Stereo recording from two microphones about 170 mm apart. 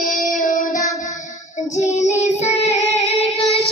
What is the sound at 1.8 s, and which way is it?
Child singing, 45° left (ahead or behind).